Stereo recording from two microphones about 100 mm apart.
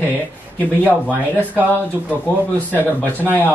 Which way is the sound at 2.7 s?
20° left (ahead or behind).